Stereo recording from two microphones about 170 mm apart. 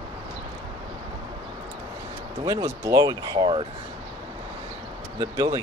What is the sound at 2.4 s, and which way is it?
Speech, 20° right (ahead or behind).